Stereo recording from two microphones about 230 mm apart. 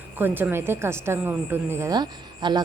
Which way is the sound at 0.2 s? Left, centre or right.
Centre.